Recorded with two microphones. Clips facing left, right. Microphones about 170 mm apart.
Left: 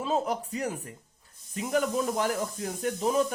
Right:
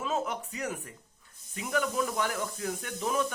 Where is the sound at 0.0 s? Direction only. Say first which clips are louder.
Left 4 dB; 35° left (ahead or behind).